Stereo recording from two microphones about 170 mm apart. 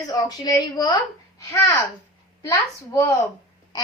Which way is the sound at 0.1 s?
20° left (ahead or behind).